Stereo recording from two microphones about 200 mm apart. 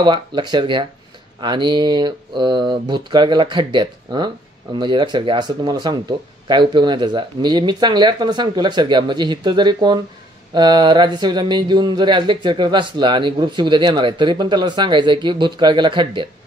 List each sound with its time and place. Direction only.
0.0 s speech: 20° right (ahead or behind)